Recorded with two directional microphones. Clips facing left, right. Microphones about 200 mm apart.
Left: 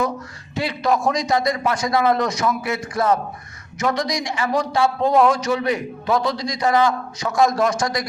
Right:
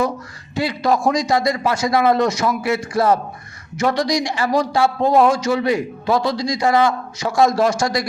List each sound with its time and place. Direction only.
0.5 s a man's voice: 35° right (ahead or behind)